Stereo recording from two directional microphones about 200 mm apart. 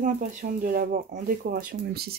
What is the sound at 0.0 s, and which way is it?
Speech, 40° right (ahead or behind).